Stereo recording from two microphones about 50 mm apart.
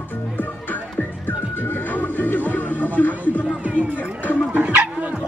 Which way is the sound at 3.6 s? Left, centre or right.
Right.